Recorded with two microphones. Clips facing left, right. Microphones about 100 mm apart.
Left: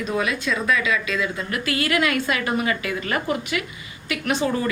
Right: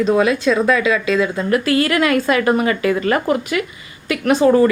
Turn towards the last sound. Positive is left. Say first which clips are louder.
# right 9 dB
turn(degrees=-45)  # may be behind; listen again after turning